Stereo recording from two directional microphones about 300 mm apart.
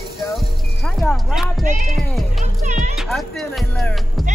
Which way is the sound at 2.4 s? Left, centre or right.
Right.